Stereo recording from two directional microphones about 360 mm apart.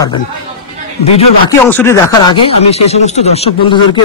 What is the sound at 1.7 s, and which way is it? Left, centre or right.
Speech, centre.